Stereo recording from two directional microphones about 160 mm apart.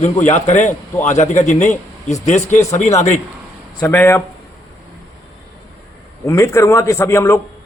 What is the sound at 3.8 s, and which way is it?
Speech, 15° left (ahead or behind).